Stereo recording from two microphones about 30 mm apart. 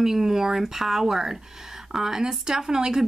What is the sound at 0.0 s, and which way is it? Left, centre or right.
Speech, centre.